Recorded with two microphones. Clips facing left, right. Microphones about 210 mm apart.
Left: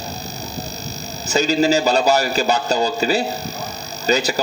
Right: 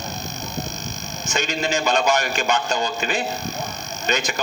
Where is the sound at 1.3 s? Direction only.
35° left (ahead or behind).